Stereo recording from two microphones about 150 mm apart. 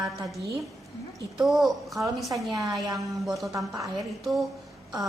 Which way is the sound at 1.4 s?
Centre (ahead or behind).